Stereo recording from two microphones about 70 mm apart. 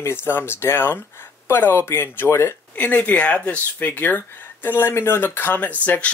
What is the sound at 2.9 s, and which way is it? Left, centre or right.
Speech, left.